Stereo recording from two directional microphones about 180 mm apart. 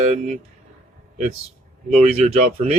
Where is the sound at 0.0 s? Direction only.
40° right (ahead or behind).